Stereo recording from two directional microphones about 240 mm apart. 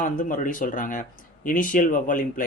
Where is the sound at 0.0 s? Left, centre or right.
Left.